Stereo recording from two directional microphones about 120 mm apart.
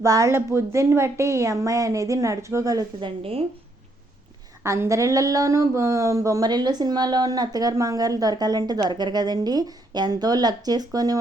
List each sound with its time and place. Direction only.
0.0 s a woman's voice: 25° right (ahead or behind)
3.0 s speech: 50° right (ahead or behind)
4.6 s speech: 25° right (ahead or behind)